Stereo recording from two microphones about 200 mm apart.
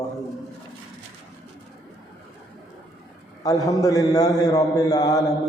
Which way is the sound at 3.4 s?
20° left (ahead or behind).